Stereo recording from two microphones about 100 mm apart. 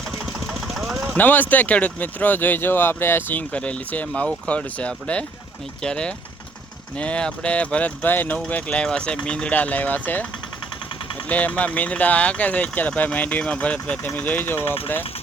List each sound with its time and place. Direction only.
0.1 s engine: centre (ahead or behind)
1.1 s speech: 15° left (ahead or behind)
11.3 s speech: 15° left (ahead or behind)